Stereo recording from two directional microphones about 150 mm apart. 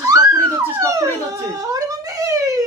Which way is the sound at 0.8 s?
25° right (ahead or behind).